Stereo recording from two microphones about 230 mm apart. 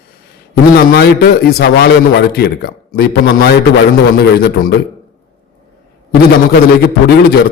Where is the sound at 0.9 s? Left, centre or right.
Left.